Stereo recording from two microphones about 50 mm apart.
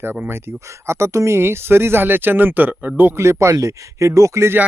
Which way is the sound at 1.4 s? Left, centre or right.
Right.